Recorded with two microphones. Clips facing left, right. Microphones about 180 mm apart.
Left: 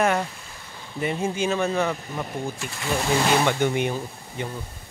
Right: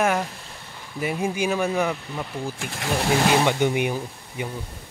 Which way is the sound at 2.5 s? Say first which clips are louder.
Right 2 dB; 55° right (ahead or behind).